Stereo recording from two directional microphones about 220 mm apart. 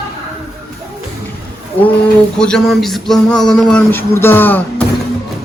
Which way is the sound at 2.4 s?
5° left (ahead or behind).